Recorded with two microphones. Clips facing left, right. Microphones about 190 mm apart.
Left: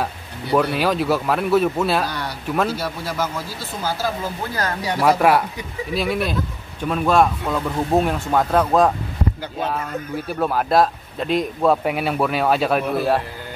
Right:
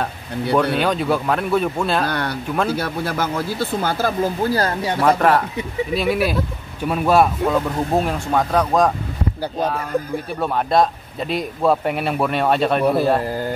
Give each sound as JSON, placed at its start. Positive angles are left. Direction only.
{"t": 0.0, "sound": "speech", "side_deg": 5}
{"t": 2.0, "sound": "speech", "side_deg": -60}
{"t": 4.6, "sound": "speech", "side_deg": -30}
{"t": 5.0, "sound": "speech", "side_deg": 10}
{"t": 5.9, "sound": "speech", "side_deg": -5}
{"t": 10.4, "sound": "speech", "side_deg": 0}